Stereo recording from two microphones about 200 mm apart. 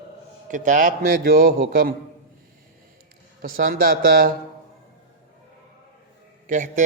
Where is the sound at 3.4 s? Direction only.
45° right (ahead or behind).